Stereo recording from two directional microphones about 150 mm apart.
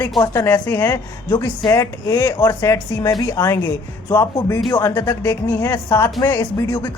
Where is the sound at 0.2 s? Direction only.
15° left (ahead or behind).